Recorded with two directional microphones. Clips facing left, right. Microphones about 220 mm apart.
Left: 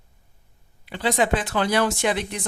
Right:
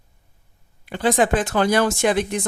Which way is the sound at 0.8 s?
50° right (ahead or behind).